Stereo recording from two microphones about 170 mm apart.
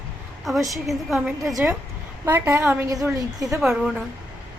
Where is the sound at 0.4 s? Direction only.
Centre (ahead or behind).